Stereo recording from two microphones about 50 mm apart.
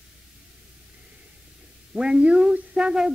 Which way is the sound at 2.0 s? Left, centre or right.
Centre.